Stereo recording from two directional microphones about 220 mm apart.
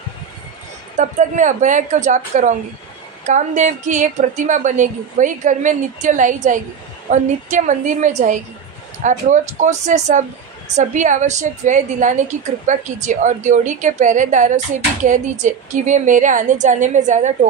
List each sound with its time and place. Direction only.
0.9 s a woman's voice: 35° right (ahead or behind)